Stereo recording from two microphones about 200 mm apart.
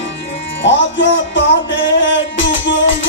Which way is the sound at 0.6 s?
65° left (ahead or behind).